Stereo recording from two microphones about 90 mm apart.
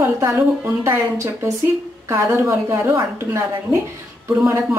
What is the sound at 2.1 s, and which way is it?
A woman's voice, 25° right (ahead or behind).